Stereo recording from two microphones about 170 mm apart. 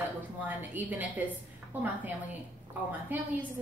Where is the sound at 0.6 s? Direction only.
10° right (ahead or behind).